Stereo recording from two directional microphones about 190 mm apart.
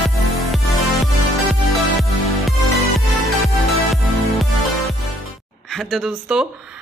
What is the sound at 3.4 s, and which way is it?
Music, centre (ahead or behind).